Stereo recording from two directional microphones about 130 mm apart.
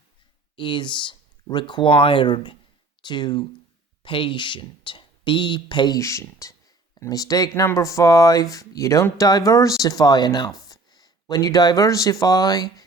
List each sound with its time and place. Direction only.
0.5 s speech: 40° left (ahead or behind)
6.0 s speech: 25° left (ahead or behind)